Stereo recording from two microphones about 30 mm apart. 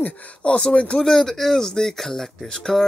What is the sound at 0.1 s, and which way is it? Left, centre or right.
Speech, left.